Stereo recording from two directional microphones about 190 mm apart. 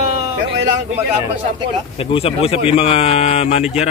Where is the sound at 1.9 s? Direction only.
30° left (ahead or behind).